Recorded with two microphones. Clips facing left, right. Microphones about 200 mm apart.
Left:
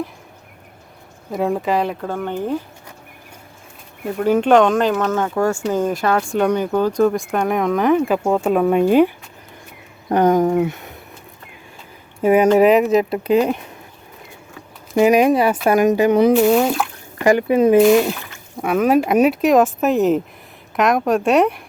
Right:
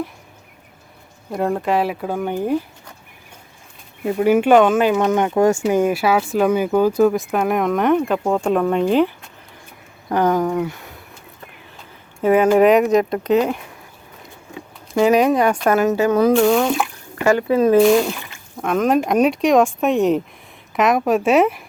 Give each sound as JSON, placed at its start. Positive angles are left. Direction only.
{"t": 1.3, "sound": "speech", "side_deg": 0}
{"t": 4.2, "sound": "speech", "side_deg": -10}
{"t": 5.5, "sound": "speech", "side_deg": -5}
{"t": 10.1, "sound": "speech", "side_deg": 20}
{"t": 12.2, "sound": "speech", "side_deg": 10}
{"t": 14.9, "sound": "speech", "side_deg": 15}
{"t": 16.3, "sound": "speech", "side_deg": 5}
{"t": 17.2, "sound": "speech", "side_deg": 15}
{"t": 17.7, "sound": "speech", "side_deg": 0}